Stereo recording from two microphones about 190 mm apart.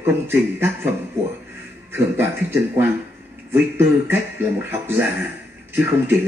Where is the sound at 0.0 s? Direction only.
10° right (ahead or behind).